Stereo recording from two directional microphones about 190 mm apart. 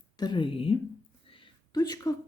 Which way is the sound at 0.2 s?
25° left (ahead or behind).